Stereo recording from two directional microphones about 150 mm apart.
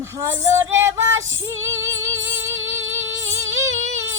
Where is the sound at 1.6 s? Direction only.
20° right (ahead or behind).